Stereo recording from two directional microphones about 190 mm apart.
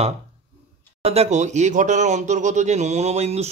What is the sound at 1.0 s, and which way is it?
Speech, 35° right (ahead or behind).